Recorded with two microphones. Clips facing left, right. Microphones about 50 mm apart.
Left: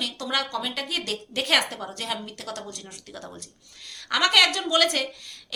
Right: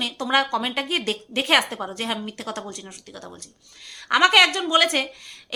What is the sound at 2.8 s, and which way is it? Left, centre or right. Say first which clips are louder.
Speech: right 1 dB; centre.